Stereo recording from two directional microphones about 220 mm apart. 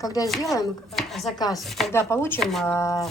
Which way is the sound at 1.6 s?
Centre (ahead or behind).